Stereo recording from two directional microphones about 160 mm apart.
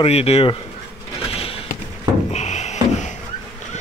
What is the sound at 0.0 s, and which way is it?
Speech, 40° left (ahead or behind).